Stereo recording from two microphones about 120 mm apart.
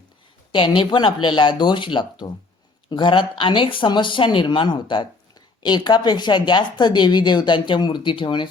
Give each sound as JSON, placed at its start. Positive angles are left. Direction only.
{"t": 0.5, "sound": "speech", "side_deg": 45}